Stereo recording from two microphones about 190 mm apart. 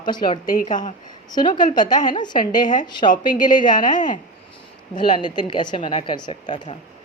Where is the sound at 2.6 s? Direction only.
40° left (ahead or behind).